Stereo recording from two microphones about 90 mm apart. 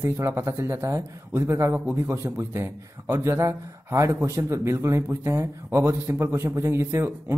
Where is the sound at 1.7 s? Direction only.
20° right (ahead or behind).